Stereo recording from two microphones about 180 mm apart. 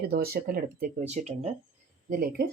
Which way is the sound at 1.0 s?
40° right (ahead or behind).